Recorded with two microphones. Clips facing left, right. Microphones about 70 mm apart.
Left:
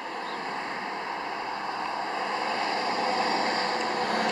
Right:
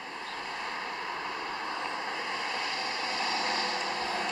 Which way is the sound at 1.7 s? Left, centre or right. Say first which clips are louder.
Left 4 dB; left.